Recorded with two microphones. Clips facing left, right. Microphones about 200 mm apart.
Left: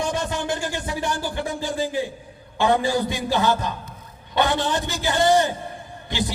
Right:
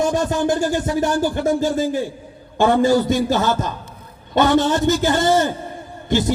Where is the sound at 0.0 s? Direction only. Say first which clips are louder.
Right 7 dB; 45° right (ahead or behind).